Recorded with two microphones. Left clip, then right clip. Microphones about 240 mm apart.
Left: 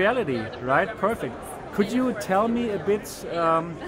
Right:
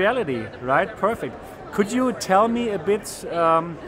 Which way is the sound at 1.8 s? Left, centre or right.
Right.